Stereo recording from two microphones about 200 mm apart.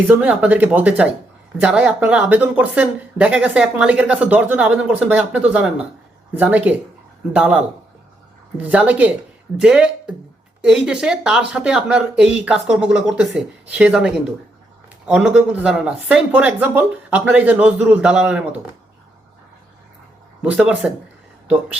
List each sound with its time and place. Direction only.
0.1 s speech: 5° right (ahead or behind)
8.6 s speech: 5° right (ahead or behind)
20.4 s speech: 5° right (ahead or behind)